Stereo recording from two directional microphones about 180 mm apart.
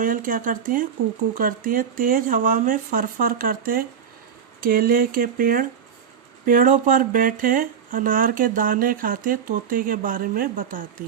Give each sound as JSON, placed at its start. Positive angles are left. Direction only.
{"t": 0.0, "sound": "speech", "side_deg": -50}